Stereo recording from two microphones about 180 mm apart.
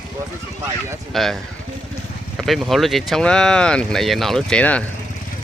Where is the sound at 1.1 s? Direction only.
Centre (ahead or behind).